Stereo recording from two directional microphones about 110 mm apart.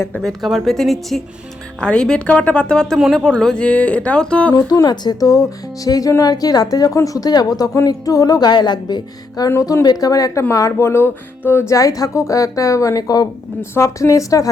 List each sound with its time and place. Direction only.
0.1 s a woman's voice: 5° left (ahead or behind)
3.0 s a woman's voice: 5° right (ahead or behind)
3.2 s speech: 10° left (ahead or behind)
4.5 s speech: 35° left (ahead or behind)
9.5 s a woman's voice: 25° left (ahead or behind)